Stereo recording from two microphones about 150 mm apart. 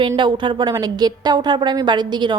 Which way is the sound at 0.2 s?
30° right (ahead or behind).